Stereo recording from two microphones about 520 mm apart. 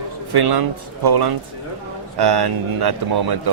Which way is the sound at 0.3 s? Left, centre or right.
Right.